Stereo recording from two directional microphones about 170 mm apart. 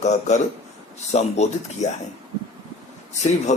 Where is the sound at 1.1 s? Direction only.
40° left (ahead or behind).